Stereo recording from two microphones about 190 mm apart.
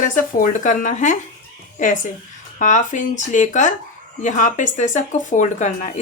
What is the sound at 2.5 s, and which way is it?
Speech, 40° left (ahead or behind).